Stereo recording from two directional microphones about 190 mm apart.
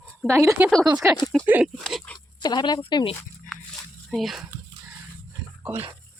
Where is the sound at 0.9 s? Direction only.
15° right (ahead or behind); by 2.2 s 5° left (ahead or behind).